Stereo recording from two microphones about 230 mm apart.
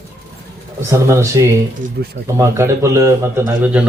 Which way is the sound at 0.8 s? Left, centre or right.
Centre.